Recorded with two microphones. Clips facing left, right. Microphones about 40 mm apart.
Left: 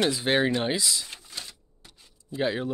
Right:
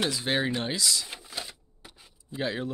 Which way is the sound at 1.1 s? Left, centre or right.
Centre.